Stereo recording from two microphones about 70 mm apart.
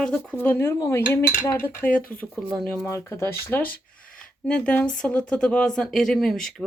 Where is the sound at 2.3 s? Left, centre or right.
Centre.